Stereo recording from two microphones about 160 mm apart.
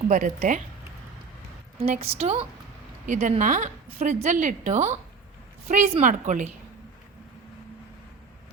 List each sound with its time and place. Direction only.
0.1 s a woman's voice: 55° right (ahead or behind)
1.8 s a woman's voice: 40° right (ahead or behind)